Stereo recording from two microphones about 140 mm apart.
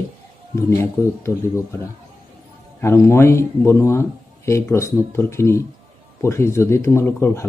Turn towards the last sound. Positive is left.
turn(degrees=20)  # may be behind; listen again after turning